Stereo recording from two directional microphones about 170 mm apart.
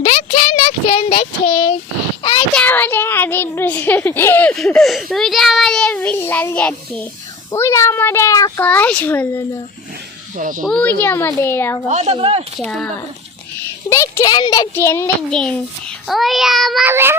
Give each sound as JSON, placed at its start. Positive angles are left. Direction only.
{"t": 0.0, "sound": "speech", "side_deg": 35}
{"t": 2.6, "sound": "a child's voice", "side_deg": 10}
{"t": 10.3, "sound": "a child's voice", "side_deg": -50}
{"t": 10.7, "sound": "a child's voice", "side_deg": 10}
{"t": 11.9, "sound": "speech", "side_deg": -40}
{"t": 12.5, "sound": "a child's voice", "side_deg": 5}
{"t": 13.9, "sound": "a child's voice", "side_deg": 20}
{"t": 16.8, "sound": "child singing", "side_deg": -15}